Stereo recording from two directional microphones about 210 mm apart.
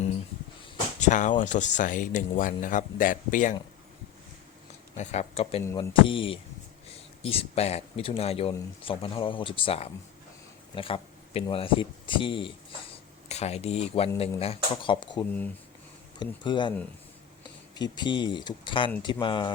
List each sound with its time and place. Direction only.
0.9 s speech: 35° left (ahead or behind)
4.9 s speech: 30° left (ahead or behind)
5.6 s speech: 15° left (ahead or behind)
5.9 s speech: 25° left (ahead or behind)
17.7 s speech: 20° left (ahead or behind)